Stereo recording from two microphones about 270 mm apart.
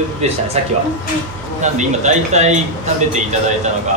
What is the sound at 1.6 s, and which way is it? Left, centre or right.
A man's voice, right.